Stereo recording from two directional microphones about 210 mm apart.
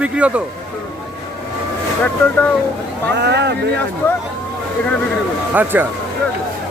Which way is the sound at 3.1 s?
55° right (ahead or behind).